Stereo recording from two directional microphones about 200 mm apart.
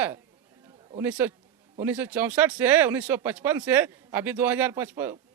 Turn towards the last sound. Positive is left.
turn(degrees=-10)  # may be behind; listen again after turning